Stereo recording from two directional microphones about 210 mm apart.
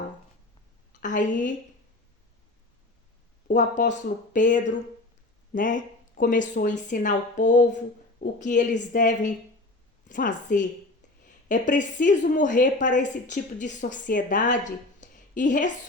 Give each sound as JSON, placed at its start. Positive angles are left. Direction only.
{"t": 1.0, "sound": "a woman's voice", "side_deg": 35}
{"t": 3.5, "sound": "a woman's voice", "side_deg": 35}